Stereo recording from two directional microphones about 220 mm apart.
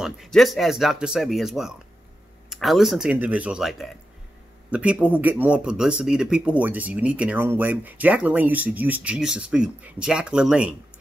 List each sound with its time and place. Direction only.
0.0 s speech: centre (ahead or behind)